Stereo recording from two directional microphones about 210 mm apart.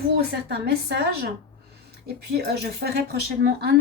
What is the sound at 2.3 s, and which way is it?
A woman's voice, 50° right (ahead or behind).